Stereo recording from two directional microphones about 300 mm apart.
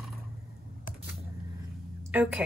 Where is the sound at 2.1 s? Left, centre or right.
Centre.